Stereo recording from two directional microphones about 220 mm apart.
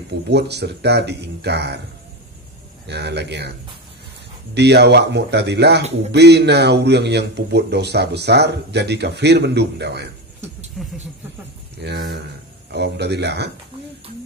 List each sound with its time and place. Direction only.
0.3 s a man's voice: 50° right (ahead or behind)
2.9 s a man's voice: 50° right (ahead or behind)
4.6 s a man's voice: 50° right (ahead or behind)
10.8 s speech: centre (ahead or behind)
11.8 s a man's voice: 50° right (ahead or behind)